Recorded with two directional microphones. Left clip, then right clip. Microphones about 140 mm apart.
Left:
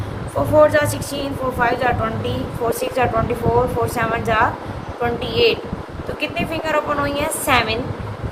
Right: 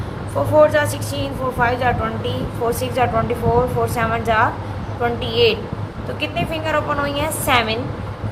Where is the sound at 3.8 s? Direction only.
30° right (ahead or behind).